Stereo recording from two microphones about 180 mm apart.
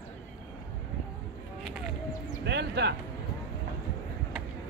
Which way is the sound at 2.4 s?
70° right (ahead or behind).